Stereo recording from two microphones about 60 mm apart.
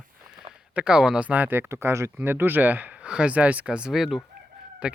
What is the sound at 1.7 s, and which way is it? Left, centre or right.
Speech, right.